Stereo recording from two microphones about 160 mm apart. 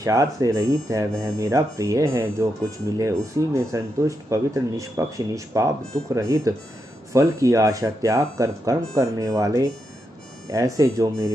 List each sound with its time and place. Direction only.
0.0 s speech: 20° right (ahead or behind)